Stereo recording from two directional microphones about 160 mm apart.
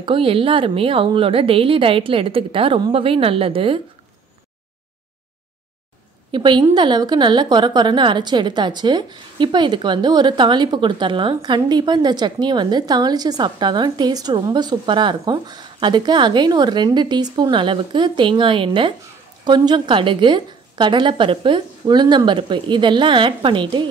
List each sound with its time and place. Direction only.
0.0 s speech: 35° right (ahead or behind)
6.3 s a woman's voice: 30° right (ahead or behind)